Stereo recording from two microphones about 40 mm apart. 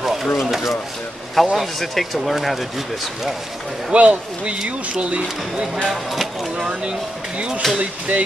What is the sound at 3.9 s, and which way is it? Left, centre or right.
Speech, right.